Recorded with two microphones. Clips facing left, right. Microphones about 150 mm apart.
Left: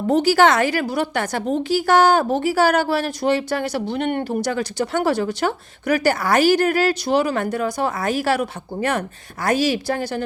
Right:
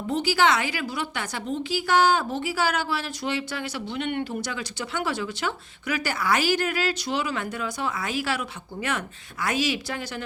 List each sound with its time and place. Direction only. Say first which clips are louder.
0.1 s a woman's voice: left 7 dB; 50° left (ahead or behind)